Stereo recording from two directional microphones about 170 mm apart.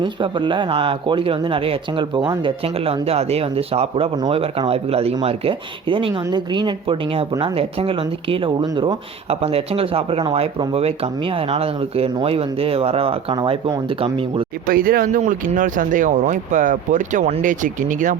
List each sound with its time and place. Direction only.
0.0 s speech: 30° right (ahead or behind)
14.7 s speech: 60° right (ahead or behind)